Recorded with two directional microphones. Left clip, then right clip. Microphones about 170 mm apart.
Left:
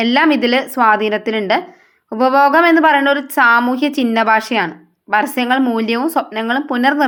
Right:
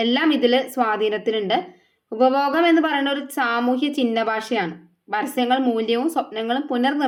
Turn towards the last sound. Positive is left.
turn(degrees=25)  # may be behind; listen again after turning